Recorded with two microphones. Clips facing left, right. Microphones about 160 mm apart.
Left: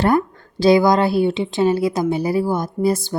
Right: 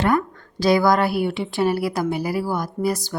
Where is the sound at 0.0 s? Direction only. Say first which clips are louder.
Left 3 dB; 30° left (ahead or behind).